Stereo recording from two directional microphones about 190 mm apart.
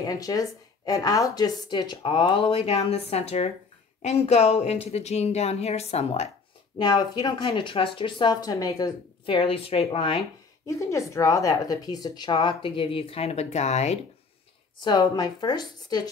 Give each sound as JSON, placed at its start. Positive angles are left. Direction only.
{"t": 0.0, "sound": "speech", "side_deg": 20}
{"t": 6.8, "sound": "speech", "side_deg": 20}
{"t": 10.7, "sound": "speech", "side_deg": 15}
{"t": 14.8, "sound": "speech", "side_deg": 20}